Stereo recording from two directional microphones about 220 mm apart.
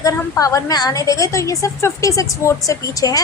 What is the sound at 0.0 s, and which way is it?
A woman's voice, 15° left (ahead or behind).